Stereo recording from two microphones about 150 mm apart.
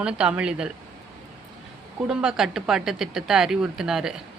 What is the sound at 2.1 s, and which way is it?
Speech, 5° right (ahead or behind).